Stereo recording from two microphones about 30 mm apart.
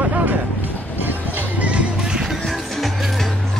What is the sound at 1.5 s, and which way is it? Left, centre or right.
Music, right.